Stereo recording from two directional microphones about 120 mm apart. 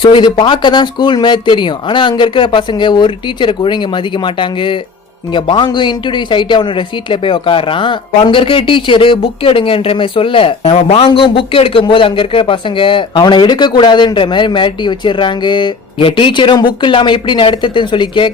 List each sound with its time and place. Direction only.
0.0 s speech: 40° left (ahead or behind)